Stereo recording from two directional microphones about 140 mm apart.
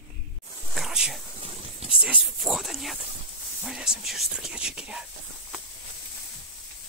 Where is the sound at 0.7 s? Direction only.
5° right (ahead or behind).